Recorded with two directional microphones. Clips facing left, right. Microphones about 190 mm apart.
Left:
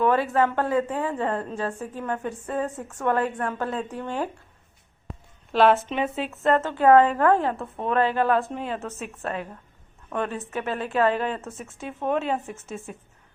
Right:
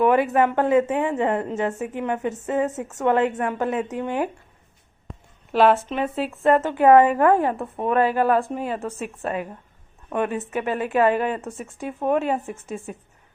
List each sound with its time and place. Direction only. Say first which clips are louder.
0.0 s a woman's voice: right 3 dB; 15° right (ahead or behind)
5.5 s speech: right 1 dB; 5° right (ahead or behind)
6.3 s a woman's voice: right 4 dB; 15° right (ahead or behind)